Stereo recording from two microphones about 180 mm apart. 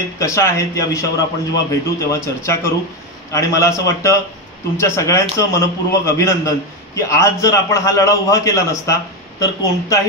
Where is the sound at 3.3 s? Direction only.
15° left (ahead or behind).